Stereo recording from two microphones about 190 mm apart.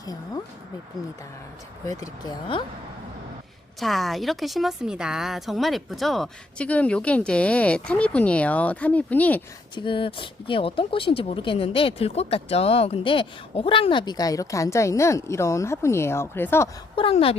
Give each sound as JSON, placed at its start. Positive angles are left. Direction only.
{"t": 0.0, "sound": "speech", "side_deg": 20}
{"t": 1.9, "sound": "speech", "side_deg": 20}
{"t": 3.8, "sound": "a woman's voice", "side_deg": 0}
{"t": 9.7, "sound": "speech", "side_deg": 25}
{"t": 16.9, "sound": "speech", "side_deg": 30}